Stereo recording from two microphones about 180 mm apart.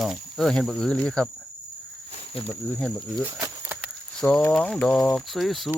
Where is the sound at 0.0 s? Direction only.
Centre (ahead or behind).